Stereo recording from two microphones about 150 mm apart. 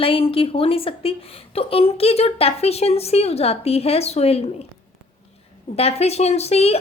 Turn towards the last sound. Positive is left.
turn(degrees=45)  # may be behind; listen again after turning